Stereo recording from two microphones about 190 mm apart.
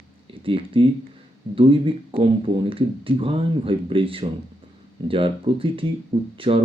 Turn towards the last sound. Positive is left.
turn(degrees=-30)  # may be behind; listen again after turning